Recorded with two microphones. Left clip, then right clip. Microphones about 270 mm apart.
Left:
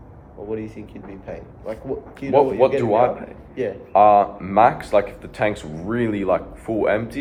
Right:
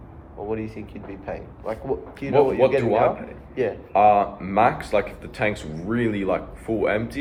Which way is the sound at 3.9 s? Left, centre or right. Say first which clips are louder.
Left 4 dB; centre.